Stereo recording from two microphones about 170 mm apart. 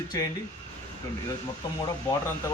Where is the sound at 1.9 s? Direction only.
20° left (ahead or behind).